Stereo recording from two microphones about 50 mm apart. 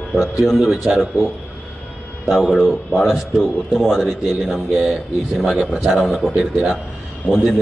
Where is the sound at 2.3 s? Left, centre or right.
Centre.